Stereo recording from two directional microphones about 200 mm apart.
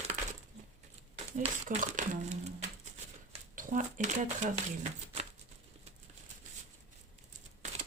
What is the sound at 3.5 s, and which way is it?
Speech, 40° right (ahead or behind).